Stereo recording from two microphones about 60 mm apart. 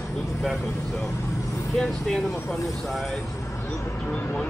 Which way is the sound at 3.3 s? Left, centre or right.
Left.